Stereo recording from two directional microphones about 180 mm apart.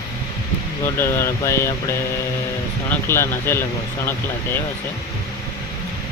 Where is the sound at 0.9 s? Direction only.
15° left (ahead or behind).